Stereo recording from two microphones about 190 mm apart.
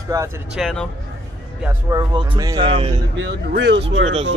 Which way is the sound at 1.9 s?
20° right (ahead or behind).